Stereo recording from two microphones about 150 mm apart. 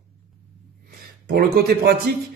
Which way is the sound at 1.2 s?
90° right.